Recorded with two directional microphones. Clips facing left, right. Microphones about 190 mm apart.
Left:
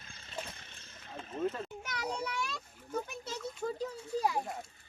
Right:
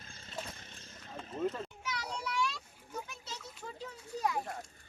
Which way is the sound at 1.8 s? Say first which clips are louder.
Left 5 dB; 50° left (ahead or behind).